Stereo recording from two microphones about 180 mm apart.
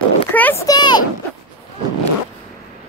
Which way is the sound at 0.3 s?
10° left (ahead or behind).